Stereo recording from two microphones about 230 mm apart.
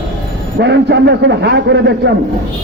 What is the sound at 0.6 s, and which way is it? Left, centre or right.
A man's voice, right.